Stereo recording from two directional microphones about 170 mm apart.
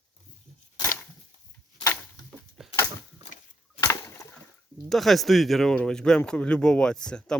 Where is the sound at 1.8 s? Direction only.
15° left (ahead or behind).